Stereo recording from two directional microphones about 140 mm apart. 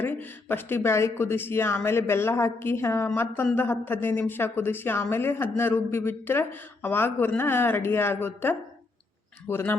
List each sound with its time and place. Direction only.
0.0 s speech: 15° left (ahead or behind)